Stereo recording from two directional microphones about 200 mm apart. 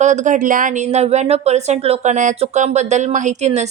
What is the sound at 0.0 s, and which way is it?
Speech, 35° right (ahead or behind).